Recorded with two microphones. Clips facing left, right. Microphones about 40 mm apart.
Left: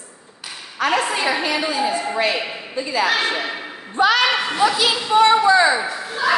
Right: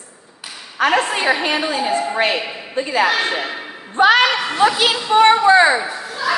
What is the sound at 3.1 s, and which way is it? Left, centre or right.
Speech, centre.